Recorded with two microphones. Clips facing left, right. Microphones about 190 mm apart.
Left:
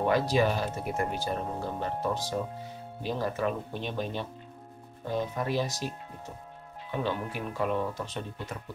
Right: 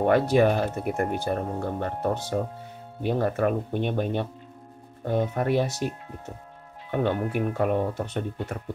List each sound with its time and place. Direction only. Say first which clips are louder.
0.0 s speech: right 5 dB; 55° right (ahead or behind)
6.9 s speech: right 6 dB; 55° right (ahead or behind)